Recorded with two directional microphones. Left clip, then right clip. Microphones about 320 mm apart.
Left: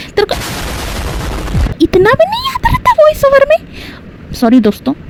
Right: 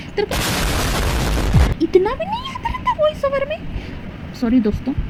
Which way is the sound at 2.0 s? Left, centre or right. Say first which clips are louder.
Left 13 dB; left.